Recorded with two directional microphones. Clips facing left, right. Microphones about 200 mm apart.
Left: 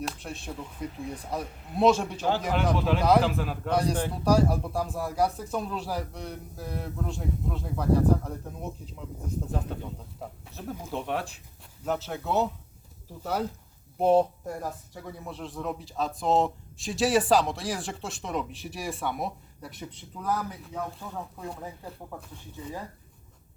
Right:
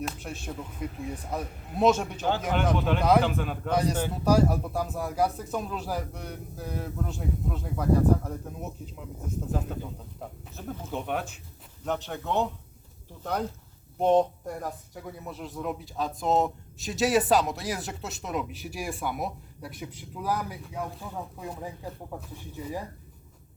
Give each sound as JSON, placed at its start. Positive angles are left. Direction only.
{"t": 0.0, "sound": "speech", "side_deg": 0}
{"t": 14.0, "sound": "speech", "side_deg": 5}